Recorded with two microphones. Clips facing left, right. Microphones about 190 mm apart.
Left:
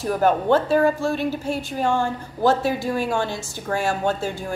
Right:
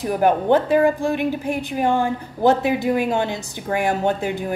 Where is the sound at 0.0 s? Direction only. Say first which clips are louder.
Right 1 dB; 15° right (ahead or behind).